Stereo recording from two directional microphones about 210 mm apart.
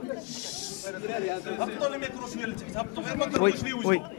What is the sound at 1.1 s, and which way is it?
Speech, 15° left (ahead or behind).